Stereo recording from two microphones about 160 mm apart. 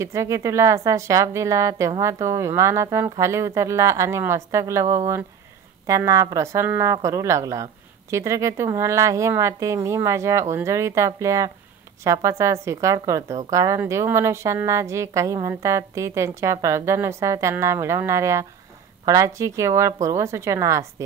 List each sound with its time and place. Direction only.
0.0 s a woman's voice: 20° right (ahead or behind)